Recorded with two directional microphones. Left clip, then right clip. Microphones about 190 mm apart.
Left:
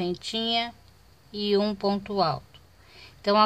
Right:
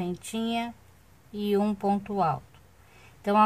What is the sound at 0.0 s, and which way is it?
Speech, 10° left (ahead or behind).